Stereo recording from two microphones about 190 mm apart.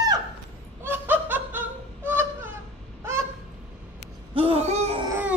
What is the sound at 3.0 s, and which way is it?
Honk, 15° right (ahead or behind).